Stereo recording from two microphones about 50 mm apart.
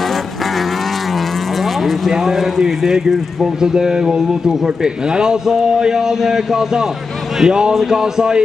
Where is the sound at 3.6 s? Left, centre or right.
Centre.